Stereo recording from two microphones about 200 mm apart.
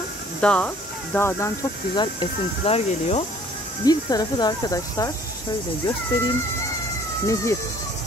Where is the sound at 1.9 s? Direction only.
25° left (ahead or behind).